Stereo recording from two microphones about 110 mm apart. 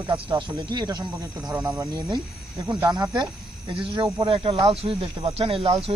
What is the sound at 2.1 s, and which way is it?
Speech, 40° right (ahead or behind).